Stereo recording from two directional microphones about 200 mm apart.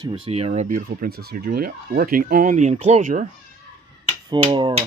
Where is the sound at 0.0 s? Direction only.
30° right (ahead or behind).